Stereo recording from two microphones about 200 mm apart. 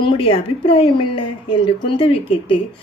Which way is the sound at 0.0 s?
25° left (ahead or behind).